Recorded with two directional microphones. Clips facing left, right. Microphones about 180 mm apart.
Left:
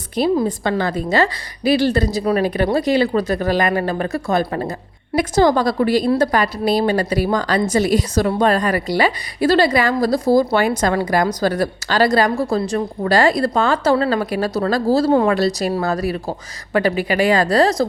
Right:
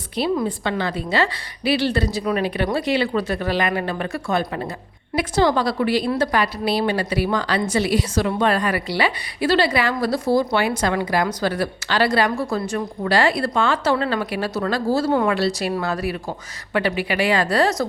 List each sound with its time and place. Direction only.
0.4 s a woman's voice: 40° left (ahead or behind)